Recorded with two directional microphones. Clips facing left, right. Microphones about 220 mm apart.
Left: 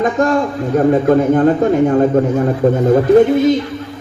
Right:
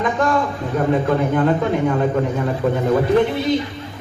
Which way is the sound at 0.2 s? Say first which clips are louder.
Left 5 dB; 45° left (ahead or behind).